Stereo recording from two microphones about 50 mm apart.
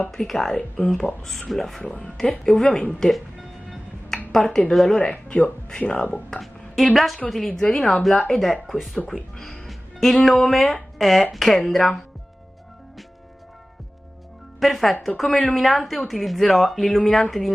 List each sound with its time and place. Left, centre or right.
0.1 s speech: centre
1.8 s speech: centre
3.1 s music: centre
4.3 s speech: centre
5.0 s speech: left
6.4 s a woman's voice: centre
9.1 s speech: centre
14.6 s speech: centre